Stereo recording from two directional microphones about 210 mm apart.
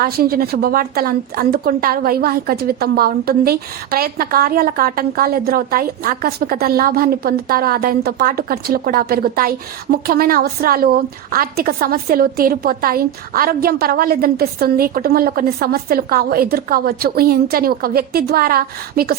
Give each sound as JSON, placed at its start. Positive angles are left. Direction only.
{"t": 0.0, "sound": "a woman's voice", "side_deg": -45}